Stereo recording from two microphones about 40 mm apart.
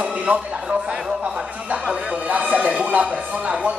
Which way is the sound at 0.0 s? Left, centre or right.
Right.